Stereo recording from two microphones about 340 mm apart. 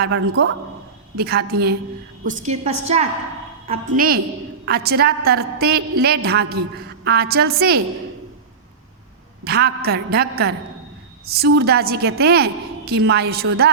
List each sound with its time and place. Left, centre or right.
0.0 s a woman's voice: right
9.4 s a woman's voice: right